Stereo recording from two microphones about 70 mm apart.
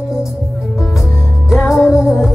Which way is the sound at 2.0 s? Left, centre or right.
Centre.